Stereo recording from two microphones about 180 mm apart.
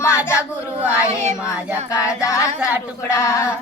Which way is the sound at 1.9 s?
15° left (ahead or behind).